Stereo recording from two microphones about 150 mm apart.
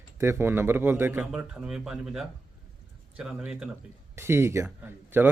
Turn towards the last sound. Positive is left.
turn(degrees=-15)  # may be behind; listen again after turning